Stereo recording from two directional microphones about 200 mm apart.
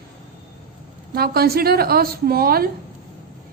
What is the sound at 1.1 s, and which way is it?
A woman's voice, 50° right (ahead or behind).